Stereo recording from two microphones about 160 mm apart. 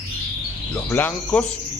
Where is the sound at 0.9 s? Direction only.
10° left (ahead or behind).